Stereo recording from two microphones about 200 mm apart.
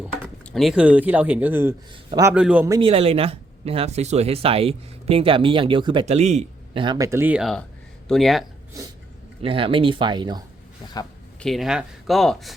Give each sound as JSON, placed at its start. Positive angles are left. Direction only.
{"t": 0.5, "sound": "speech", "side_deg": 0}
{"t": 2.7, "sound": "speech", "side_deg": -30}
{"t": 6.8, "sound": "speech", "side_deg": -20}
{"t": 9.4, "sound": "speech", "side_deg": -25}
{"t": 11.3, "sound": "speech", "side_deg": 0}